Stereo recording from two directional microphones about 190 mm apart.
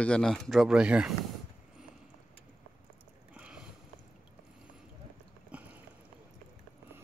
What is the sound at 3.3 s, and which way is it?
Sniff, 5° right (ahead or behind).